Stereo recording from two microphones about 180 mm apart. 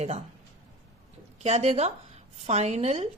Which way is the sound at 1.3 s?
40° right (ahead or behind).